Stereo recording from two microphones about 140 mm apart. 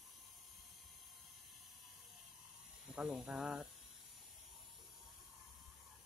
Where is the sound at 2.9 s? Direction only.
5° right (ahead or behind).